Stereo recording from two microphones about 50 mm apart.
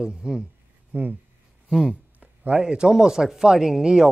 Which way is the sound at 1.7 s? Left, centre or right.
Centre.